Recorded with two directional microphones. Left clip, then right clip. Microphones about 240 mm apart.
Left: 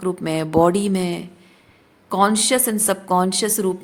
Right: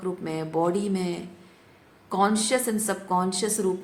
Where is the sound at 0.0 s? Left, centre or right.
Left.